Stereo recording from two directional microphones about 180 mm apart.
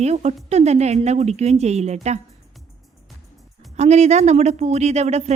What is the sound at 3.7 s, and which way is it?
A woman's voice, 40° right (ahead or behind).